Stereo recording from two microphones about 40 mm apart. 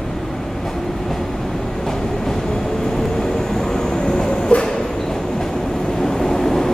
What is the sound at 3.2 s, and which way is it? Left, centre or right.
Train, centre.